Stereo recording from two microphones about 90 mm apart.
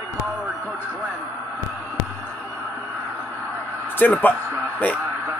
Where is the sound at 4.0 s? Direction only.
20° left (ahead or behind).